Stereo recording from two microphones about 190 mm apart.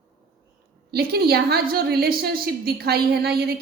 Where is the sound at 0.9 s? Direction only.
55° right (ahead or behind).